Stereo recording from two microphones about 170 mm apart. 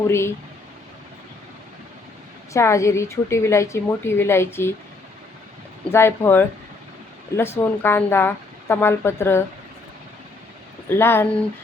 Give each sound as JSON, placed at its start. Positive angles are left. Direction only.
{"t": 0.1, "sound": "a woman's voice", "side_deg": 15}
{"t": 2.5, "sound": "a woman's voice", "side_deg": 15}
{"t": 5.9, "sound": "a woman's voice", "side_deg": 15}
{"t": 10.8, "sound": "a woman's voice", "side_deg": 15}